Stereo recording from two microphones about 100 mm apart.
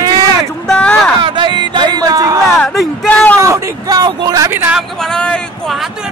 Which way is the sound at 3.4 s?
30° right (ahead or behind).